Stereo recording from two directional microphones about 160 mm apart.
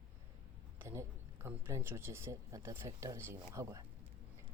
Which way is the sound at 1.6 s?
15° right (ahead or behind).